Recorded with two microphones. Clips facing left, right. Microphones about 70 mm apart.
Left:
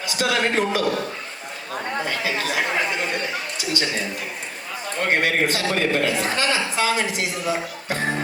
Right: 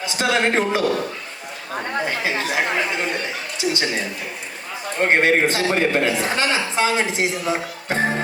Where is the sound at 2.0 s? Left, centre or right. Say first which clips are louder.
Right 2 dB; right.